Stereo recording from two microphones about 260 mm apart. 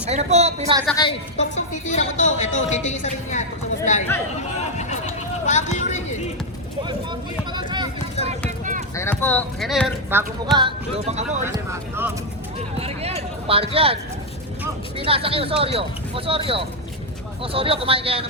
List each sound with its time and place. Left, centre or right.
0.1 s speech: right
0.9 s a woman's voice: left
5.5 s a woman's voice: left
6.8 s speech: centre
8.4 s basketball bounce: right
9.0 s speech: centre; by 11.4 s right
11.4 s speech: centre
12.8 s speech: right